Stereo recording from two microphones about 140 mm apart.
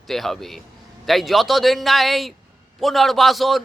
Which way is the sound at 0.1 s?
Centre (ahead or behind).